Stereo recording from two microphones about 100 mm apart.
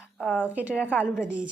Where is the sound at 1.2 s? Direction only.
10° right (ahead or behind).